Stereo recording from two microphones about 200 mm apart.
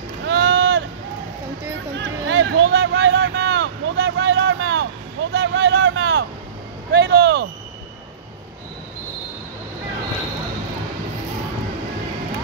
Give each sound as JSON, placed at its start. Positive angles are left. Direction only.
{"t": 0.3, "sound": "run", "side_deg": -60}
{"t": 2.0, "sound": "a sound", "side_deg": -65}
{"t": 5.3, "sound": "vehicle", "side_deg": -60}
{"t": 6.9, "sound": "vehicle", "side_deg": -55}